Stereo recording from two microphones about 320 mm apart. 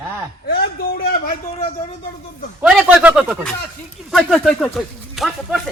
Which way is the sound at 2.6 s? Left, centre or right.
Centre.